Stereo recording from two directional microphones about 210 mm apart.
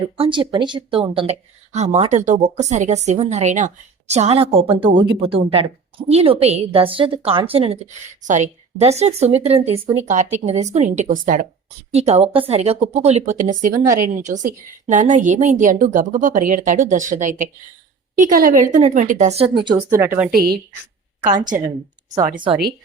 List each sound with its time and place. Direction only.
0.0 s a woman's voice: 25° right (ahead or behind)
19.6 s speech: 15° right (ahead or behind)
20.3 s a woman's voice: 45° right (ahead or behind)